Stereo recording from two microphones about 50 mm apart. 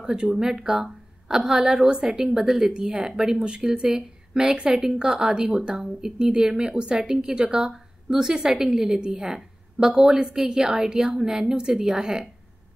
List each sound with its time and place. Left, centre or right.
0.0 s speech: centre